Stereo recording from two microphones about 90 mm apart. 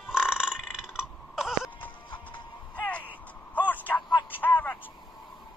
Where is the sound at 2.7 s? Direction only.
20° left (ahead or behind).